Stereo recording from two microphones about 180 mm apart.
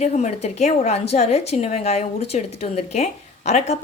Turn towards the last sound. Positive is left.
turn(degrees=40)  # may be behind; listen again after turning